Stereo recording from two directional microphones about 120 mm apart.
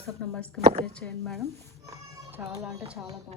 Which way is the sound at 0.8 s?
5° left (ahead or behind).